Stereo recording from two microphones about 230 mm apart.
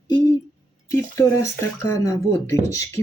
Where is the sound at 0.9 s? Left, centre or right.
Centre.